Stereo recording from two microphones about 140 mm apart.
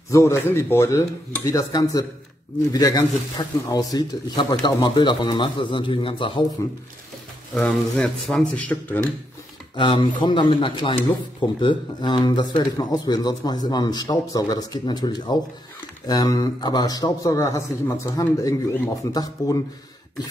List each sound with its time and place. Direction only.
0.1 s a man's voice: 20° left (ahead or behind); by 6.4 s 35° left (ahead or behind)
7.5 s speech: 5° left (ahead or behind)
9.8 s a man's voice: 35° left (ahead or behind)